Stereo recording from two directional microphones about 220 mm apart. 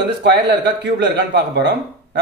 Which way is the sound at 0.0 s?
50° right (ahead or behind).